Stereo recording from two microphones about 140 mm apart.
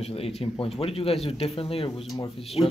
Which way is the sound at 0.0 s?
45° left (ahead or behind).